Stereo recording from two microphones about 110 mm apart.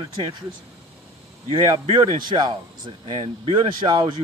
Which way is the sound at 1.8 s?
50° right (ahead or behind).